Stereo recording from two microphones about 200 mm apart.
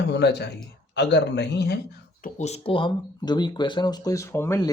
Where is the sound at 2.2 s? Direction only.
35° left (ahead or behind).